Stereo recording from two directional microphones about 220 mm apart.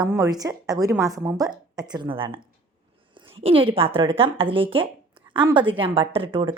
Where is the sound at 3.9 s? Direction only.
25° right (ahead or behind).